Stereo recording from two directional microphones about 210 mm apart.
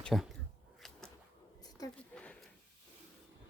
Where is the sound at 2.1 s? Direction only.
5° left (ahead or behind).